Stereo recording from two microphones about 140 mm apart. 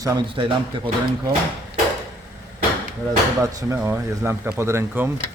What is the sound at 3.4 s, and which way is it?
Speech, 25° right (ahead or behind).